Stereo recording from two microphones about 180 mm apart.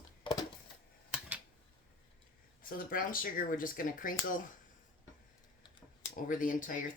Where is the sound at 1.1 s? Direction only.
10° right (ahead or behind).